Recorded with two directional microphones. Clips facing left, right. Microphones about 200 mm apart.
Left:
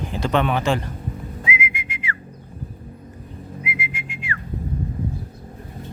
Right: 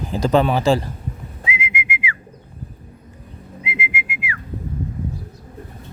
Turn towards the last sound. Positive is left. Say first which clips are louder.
# right 2 dB
turn(degrees=-10)  # may be behind; listen again after turning